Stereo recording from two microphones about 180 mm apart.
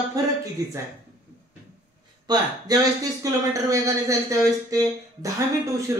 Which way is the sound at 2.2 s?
20° right (ahead or behind).